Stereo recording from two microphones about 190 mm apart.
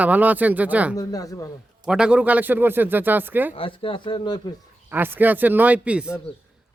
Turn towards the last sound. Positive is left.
turn(degrees=-5)  # may be behind; listen again after turning